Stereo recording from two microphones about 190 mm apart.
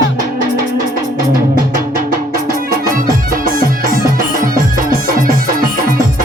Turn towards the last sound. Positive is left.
turn(degrees=-50)  # may be behind; listen again after turning